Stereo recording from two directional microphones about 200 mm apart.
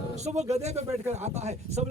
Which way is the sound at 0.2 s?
35° right (ahead or behind).